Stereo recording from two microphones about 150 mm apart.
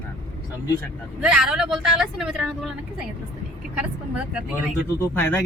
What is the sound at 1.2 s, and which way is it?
Speech, 5° right (ahead or behind).